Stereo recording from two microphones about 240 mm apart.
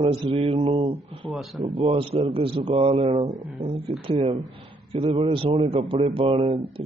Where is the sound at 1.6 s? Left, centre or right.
Right.